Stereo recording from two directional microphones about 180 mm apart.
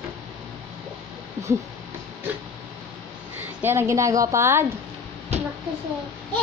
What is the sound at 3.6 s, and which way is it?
A woman's voice, 15° right (ahead or behind).